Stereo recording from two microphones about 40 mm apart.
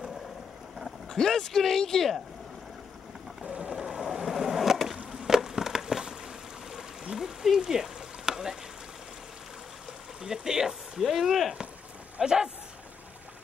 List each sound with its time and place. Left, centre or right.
1.0 s speech: centre
3.4 s skateboard: right; by 4.9 s centre
5.2 s a sound: centre
10.2 s speech: centre
11.0 s speech: centre
12.2 s speech: centre